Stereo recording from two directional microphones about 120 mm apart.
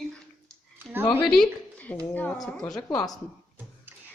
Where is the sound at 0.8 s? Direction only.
15° right (ahead or behind).